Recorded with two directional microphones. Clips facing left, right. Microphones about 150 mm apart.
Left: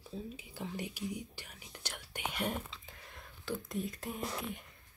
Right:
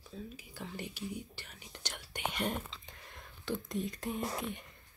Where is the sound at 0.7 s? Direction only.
10° left (ahead or behind).